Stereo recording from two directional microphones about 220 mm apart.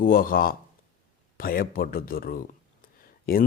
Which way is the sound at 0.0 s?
40° left (ahead or behind).